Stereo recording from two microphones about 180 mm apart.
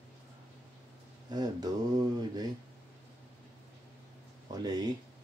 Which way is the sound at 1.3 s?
20° right (ahead or behind).